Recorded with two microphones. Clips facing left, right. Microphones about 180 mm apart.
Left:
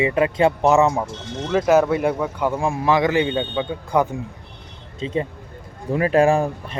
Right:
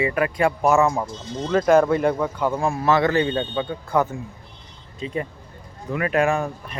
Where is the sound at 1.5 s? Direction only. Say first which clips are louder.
Even; 5° left (ahead or behind).